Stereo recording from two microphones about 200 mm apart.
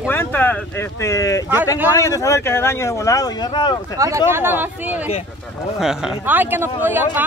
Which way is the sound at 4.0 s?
15° right (ahead or behind).